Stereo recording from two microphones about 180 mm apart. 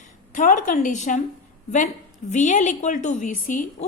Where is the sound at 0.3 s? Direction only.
45° left (ahead or behind).